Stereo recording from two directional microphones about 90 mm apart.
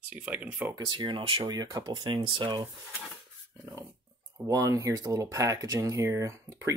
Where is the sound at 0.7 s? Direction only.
55° right (ahead or behind).